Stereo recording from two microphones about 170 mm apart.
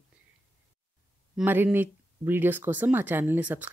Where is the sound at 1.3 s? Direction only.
10° right (ahead or behind).